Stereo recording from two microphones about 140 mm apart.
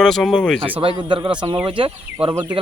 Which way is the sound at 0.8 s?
35° right (ahead or behind).